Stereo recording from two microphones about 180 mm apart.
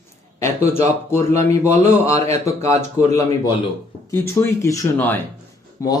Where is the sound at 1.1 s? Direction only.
15° left (ahead or behind).